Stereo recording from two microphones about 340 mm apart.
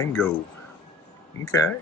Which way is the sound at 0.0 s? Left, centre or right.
Centre.